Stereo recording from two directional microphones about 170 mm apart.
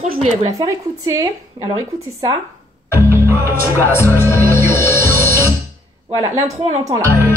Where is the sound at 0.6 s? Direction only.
20° right (ahead or behind).